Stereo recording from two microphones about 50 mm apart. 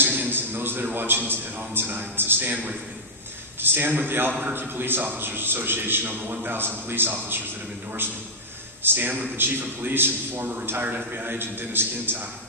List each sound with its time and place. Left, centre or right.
0.0 s a sound: right
1.3 s a man's voice: right
8.9 s a man's voice: right